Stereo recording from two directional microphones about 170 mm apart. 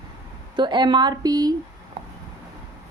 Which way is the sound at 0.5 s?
25° right (ahead or behind).